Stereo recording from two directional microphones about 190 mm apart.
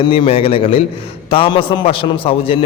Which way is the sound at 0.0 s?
25° left (ahead or behind).